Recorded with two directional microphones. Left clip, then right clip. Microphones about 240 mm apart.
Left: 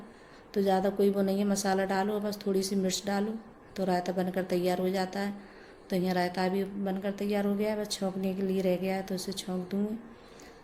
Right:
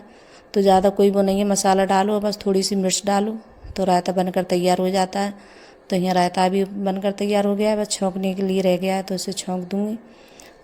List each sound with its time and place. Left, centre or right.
0.5 s a woman's voice: right